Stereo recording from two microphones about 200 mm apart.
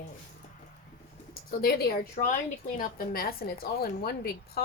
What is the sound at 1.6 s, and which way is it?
A woman's voice, 50° left (ahead or behind).